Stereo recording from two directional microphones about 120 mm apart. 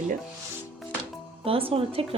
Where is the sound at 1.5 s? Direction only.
50° right (ahead or behind).